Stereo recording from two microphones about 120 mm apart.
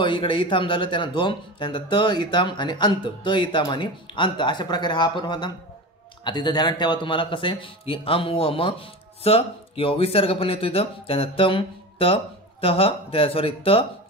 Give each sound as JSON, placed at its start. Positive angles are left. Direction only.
{"t": 0.0, "sound": "a man's voice", "side_deg": 45}